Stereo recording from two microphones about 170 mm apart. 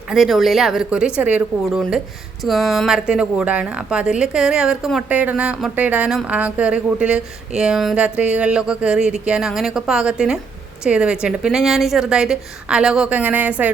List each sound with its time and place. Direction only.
0.1 s speech: centre (ahead or behind)